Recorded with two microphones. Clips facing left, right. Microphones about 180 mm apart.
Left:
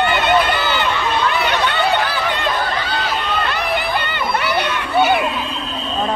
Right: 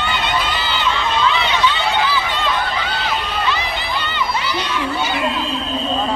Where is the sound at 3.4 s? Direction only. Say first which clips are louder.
Left 2 dB; 60° left (ahead or behind).